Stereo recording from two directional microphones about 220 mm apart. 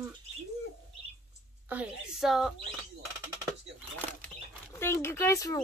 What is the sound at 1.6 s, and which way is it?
Speech, 5° right (ahead or behind).